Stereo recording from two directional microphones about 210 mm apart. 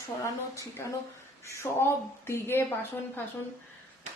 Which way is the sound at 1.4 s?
15° left (ahead or behind).